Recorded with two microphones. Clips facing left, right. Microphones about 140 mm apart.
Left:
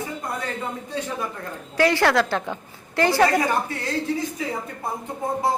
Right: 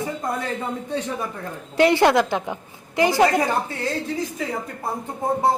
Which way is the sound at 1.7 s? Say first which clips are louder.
Right 3 dB; 20° right (ahead or behind).